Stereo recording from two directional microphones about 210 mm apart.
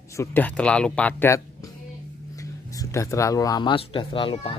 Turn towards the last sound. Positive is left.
turn(degrees=25)  # may be behind; listen again after turning